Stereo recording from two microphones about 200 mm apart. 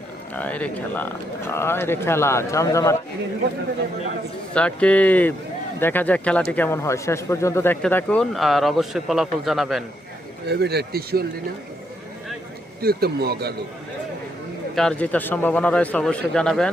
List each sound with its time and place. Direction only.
0.3 s speech: 5° left (ahead or behind)
4.5 s speech: 5° left (ahead or behind)
10.5 s speech: 55° right (ahead or behind)
12.8 s speech: 50° right (ahead or behind)
14.8 s speech: 5° left (ahead or behind)